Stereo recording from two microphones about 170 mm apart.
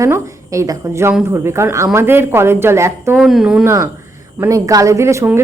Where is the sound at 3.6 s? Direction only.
15° right (ahead or behind).